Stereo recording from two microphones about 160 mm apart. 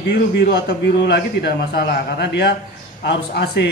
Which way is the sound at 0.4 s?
90° left.